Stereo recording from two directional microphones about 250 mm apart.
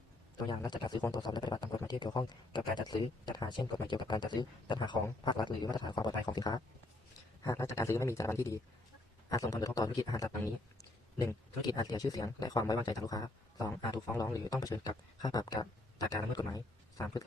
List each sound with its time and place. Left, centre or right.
0.4 s a man's voice: centre